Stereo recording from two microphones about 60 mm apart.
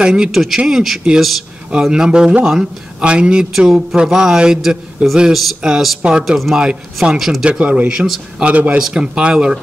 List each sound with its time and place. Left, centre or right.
0.0 s a man's voice: centre
0.3 s a man's voice: centre
3.0 s a man's voice: centre
7.4 s a man's voice: centre
8.7 s a man's voice: centre